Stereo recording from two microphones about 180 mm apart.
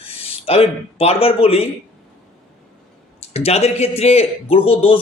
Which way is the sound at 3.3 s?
35° left (ahead or behind).